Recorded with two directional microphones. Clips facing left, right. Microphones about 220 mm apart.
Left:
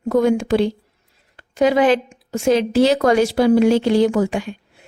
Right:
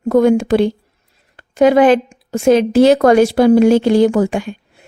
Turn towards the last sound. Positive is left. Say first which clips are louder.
# right 4 dB
turn(degrees=-50)  # may be behind; listen again after turning